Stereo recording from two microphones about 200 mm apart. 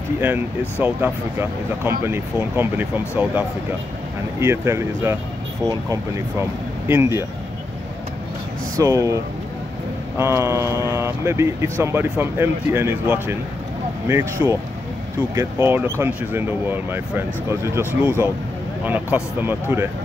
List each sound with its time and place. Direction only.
0.2 s speech: 10° right (ahead or behind)
8.7 s speech: 15° right (ahead or behind)